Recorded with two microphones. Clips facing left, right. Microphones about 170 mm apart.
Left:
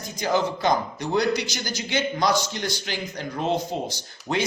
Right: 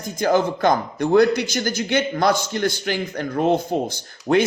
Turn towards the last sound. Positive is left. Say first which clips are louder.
# right 9 dB
turn(degrees=-55)  # may be behind; listen again after turning